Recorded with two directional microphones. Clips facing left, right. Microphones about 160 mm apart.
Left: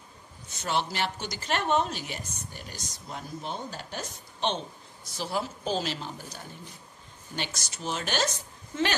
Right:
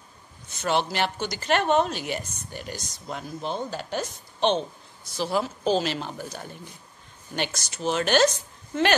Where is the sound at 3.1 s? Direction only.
90° right.